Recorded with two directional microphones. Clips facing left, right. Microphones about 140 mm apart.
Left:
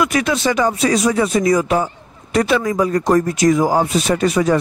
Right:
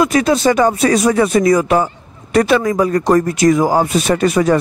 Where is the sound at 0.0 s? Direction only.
35° right (ahead or behind).